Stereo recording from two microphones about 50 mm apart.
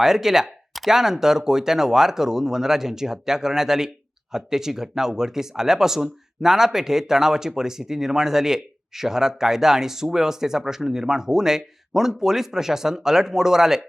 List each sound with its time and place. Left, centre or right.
0.0 s speech: centre